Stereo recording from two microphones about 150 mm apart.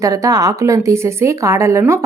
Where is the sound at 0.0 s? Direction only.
20° right (ahead or behind).